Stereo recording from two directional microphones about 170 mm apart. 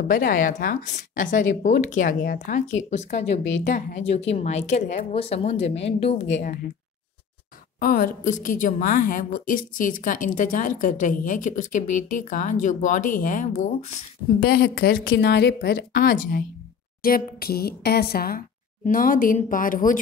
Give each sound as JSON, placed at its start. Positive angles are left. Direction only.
{"t": 0.1, "sound": "a woman's voice", "side_deg": 55}
{"t": 6.3, "sound": "a woman's voice", "side_deg": 55}
{"t": 7.8, "sound": "a woman's voice", "side_deg": 55}
{"t": 14.4, "sound": "a woman's voice", "side_deg": 65}
{"t": 18.9, "sound": "a woman's voice", "side_deg": 50}